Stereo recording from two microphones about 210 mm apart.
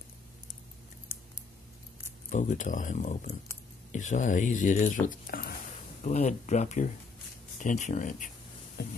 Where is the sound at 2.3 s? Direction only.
35° left (ahead or behind).